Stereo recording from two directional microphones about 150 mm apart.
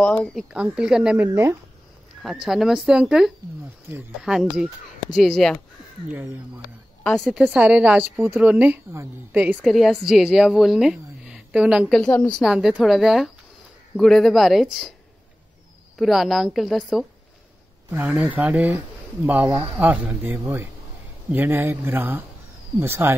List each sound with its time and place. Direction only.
0.0 s a woman's voice: 5° left (ahead or behind); by 1.6 s 15° right (ahead or behind)
2.4 s speech: centre (ahead or behind)
7.0 s a woman's voice: 5° left (ahead or behind)
7.4 s a woman's voice: 10° right (ahead or behind)
11.9 s speech: 5° left (ahead or behind)
16.0 s a woman's voice: centre (ahead or behind)